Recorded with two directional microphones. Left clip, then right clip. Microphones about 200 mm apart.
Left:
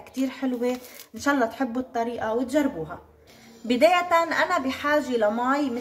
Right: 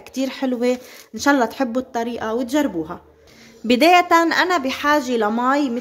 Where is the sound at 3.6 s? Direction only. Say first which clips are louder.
Right 6 dB; 60° right (ahead or behind).